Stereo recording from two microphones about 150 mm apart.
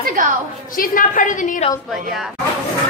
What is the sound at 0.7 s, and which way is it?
Speech, 65° left (ahead or behind).